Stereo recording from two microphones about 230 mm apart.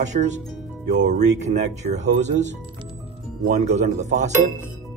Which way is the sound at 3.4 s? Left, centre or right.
Right.